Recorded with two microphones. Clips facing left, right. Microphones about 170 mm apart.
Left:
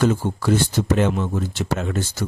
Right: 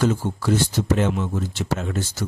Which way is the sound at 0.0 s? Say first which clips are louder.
Left 2 dB; 55° left (ahead or behind).